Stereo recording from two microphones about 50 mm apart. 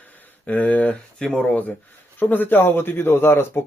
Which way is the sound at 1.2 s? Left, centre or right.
Centre.